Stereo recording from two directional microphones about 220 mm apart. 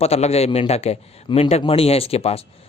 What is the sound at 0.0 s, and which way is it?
Speech, 30° left (ahead or behind).